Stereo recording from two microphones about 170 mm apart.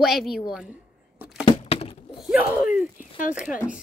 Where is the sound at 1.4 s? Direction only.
35° left (ahead or behind).